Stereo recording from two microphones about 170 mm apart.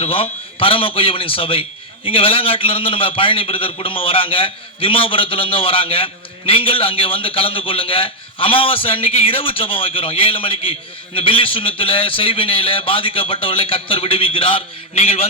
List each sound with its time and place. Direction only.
0.0 s a man's voice: 35° left (ahead or behind)